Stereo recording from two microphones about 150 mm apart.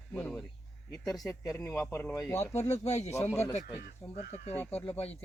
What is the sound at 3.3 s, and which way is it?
Speech, 15° left (ahead or behind).